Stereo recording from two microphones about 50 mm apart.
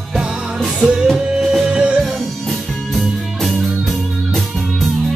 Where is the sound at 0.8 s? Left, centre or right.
Centre.